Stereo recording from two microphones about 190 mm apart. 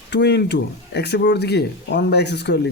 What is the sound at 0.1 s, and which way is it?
Speech, 60° left (ahead or behind).